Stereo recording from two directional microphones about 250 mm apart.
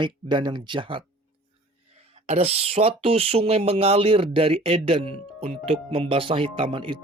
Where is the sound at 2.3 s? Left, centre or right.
Right.